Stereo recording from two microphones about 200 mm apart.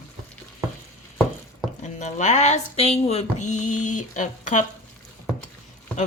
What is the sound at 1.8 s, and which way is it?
Speech, 35° left (ahead or behind).